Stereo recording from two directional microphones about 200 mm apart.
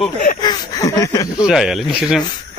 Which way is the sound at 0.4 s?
20° left (ahead or behind).